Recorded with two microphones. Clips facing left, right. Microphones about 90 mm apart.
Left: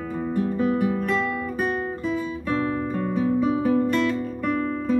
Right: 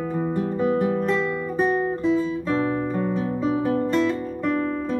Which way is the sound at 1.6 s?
30° right (ahead or behind).